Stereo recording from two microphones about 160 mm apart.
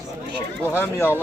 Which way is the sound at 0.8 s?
15° left (ahead or behind).